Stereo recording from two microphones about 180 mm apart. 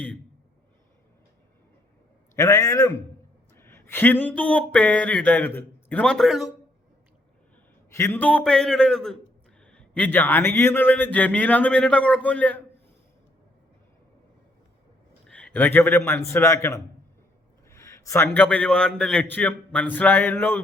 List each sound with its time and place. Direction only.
2.3 s a man's voice: 15° left (ahead or behind); by 6.5 s centre (ahead or behind)
7.9 s a man's voice: 10° left (ahead or behind)
15.3 s a man's voice: 5° left (ahead or behind)